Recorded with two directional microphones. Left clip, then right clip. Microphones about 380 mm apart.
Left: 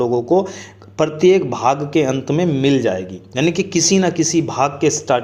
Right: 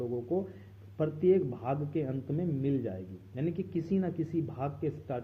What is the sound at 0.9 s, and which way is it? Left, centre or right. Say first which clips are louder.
A man's voice: left 14 dB; centre.